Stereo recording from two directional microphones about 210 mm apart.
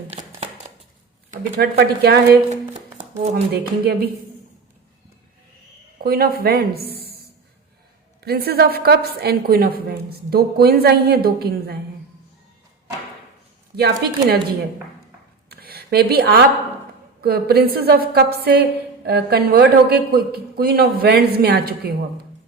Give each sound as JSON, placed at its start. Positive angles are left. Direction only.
{"t": 0.1, "sound": "a sound", "side_deg": -30}
{"t": 1.3, "sound": "a woman's voice", "side_deg": -45}
{"t": 2.5, "sound": "music", "side_deg": -30}
{"t": 3.5, "sound": "a woman's voice", "side_deg": -50}
{"t": 6.0, "sound": "a woman's voice", "side_deg": -45}
{"t": 8.2, "sound": "a woman's voice", "side_deg": -50}
{"t": 13.7, "sound": "a woman's voice", "side_deg": -50}
{"t": 15.4, "sound": "a sound", "side_deg": -45}
{"t": 17.2, "sound": "a woman's voice", "side_deg": -45}